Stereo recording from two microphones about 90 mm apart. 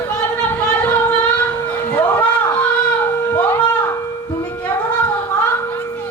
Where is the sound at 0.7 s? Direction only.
20° left (ahead or behind).